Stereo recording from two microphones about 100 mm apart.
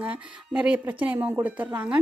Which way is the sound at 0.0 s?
10° right (ahead or behind).